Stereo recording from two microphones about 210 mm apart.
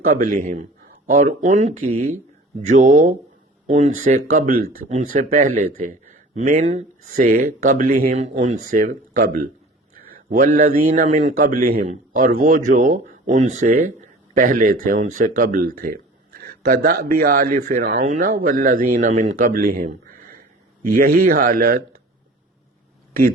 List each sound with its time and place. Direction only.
0.1 s a man's voice: 40° right (ahead or behind)